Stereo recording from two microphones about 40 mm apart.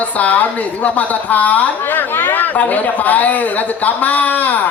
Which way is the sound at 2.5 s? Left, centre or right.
Left.